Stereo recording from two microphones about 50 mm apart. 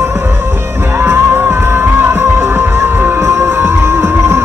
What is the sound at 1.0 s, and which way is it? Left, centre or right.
Music, right.